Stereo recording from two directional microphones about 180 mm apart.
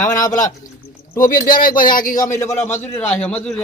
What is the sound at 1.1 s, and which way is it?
Speech, 50° left (ahead or behind).